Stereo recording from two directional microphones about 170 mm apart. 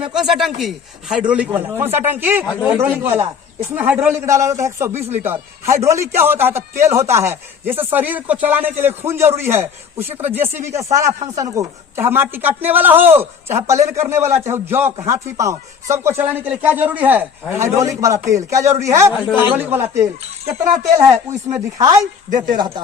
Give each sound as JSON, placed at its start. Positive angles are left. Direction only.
{"t": 0.0, "sound": "a man's voice", "side_deg": -5}
{"t": 21.0, "sound": "speech", "side_deg": -20}